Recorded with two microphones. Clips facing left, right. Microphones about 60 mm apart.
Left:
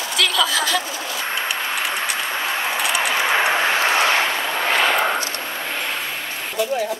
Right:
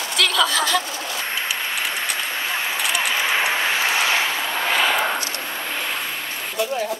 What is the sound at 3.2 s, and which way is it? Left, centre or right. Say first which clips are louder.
Vehicle: left 4 dB; left.